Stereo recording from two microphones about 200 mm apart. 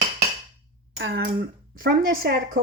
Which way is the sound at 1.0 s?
55° right (ahead or behind).